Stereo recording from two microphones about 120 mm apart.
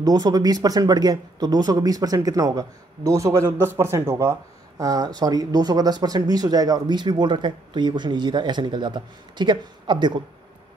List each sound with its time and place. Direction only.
0.0 s speech: 35° right (ahead or behind)